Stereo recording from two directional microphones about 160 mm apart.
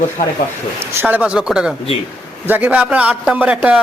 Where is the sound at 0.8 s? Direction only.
10° right (ahead or behind).